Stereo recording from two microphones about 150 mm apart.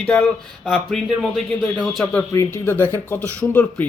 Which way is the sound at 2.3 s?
20° left (ahead or behind).